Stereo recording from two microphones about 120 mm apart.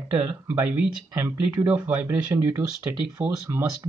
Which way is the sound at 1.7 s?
15° right (ahead or behind).